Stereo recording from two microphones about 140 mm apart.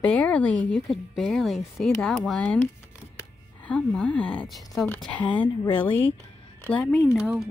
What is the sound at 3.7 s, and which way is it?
Speech, 5° left (ahead or behind).